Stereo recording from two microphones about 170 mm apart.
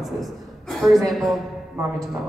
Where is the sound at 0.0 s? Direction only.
Centre (ahead or behind).